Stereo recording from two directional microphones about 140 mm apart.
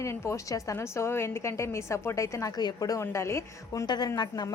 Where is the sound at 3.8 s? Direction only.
30° left (ahead or behind).